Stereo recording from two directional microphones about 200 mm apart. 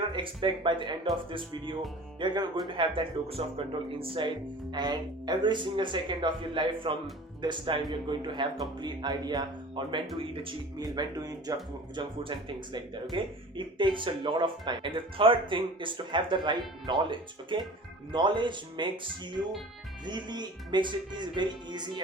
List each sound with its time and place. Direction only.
0.1 s speech: 25° right (ahead or behind)